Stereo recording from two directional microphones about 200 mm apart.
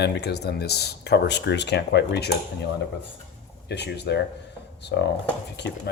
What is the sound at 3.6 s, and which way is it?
Speech, 55° left (ahead or behind).